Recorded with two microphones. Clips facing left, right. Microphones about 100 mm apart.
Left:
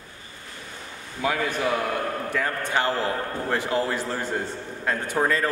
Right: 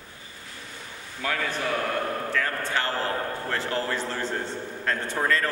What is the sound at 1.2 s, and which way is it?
A man's voice, 15° left (ahead or behind).